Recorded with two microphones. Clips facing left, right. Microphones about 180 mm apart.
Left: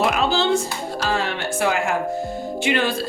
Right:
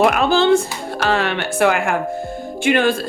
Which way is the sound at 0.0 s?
55° right (ahead or behind).